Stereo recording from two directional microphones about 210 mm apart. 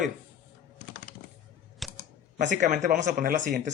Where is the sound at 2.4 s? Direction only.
35° right (ahead or behind).